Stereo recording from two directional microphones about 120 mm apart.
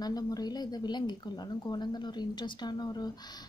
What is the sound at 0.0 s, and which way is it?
A woman's voice, 30° left (ahead or behind).